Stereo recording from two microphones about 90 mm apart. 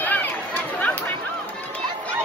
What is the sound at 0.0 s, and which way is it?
Run, 20° left (ahead or behind).